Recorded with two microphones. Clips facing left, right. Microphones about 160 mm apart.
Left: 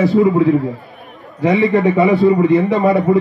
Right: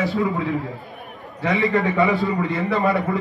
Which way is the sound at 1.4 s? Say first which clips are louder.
Left 7 dB; 20° left (ahead or behind).